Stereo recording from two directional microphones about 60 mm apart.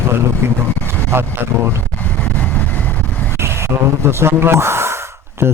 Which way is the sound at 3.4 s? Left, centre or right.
Right.